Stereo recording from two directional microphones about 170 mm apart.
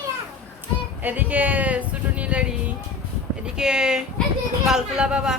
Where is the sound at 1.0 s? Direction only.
10° right (ahead or behind).